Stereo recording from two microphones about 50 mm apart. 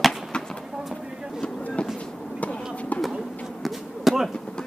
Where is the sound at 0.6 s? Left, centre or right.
Centre.